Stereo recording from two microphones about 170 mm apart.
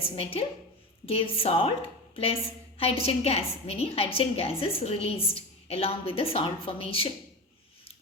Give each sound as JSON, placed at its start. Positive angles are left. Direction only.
{"t": 0.2, "sound": "a woman's voice", "side_deg": 35}